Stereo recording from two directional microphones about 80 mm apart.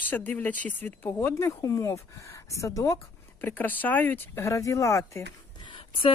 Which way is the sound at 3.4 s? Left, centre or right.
Left.